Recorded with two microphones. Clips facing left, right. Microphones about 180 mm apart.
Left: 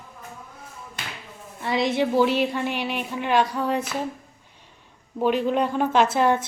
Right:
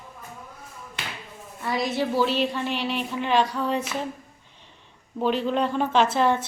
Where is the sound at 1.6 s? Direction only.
25° left (ahead or behind).